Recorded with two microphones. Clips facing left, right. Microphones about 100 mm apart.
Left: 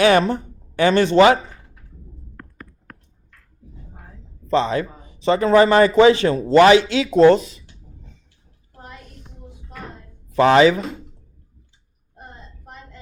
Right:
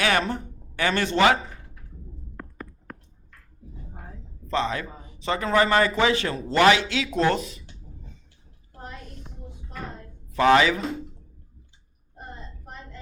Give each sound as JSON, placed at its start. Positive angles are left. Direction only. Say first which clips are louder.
{"t": 0.0, "sound": "speech", "louder": "left 9 dB", "side_deg": 30}
{"t": 2.3, "sound": "a sound", "louder": "right 3 dB", "side_deg": -15}
{"t": 4.4, "sound": "a man's voice", "louder": "left 7 dB", "side_deg": 25}
{"t": 10.3, "sound": "a man's voice", "louder": "left 5 dB", "side_deg": 25}